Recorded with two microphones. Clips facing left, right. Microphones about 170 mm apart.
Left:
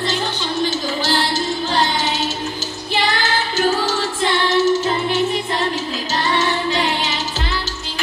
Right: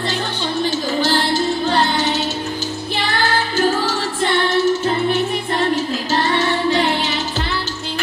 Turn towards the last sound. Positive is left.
turn(degrees=-55)  # may be behind; listen again after turning